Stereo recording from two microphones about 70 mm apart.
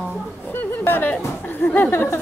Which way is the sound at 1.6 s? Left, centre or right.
Left.